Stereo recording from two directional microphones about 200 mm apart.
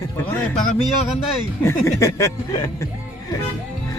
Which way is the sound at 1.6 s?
15° left (ahead or behind).